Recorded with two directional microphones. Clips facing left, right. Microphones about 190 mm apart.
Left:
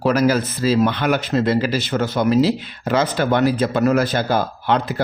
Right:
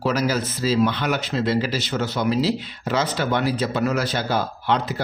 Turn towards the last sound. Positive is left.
turn(degrees=55)  # may be behind; listen again after turning